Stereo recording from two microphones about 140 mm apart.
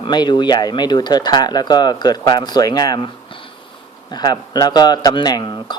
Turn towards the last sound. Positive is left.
turn(degrees=30)  # may be behind; listen again after turning